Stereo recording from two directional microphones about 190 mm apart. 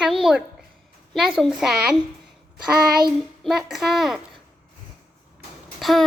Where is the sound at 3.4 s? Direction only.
Centre (ahead or behind).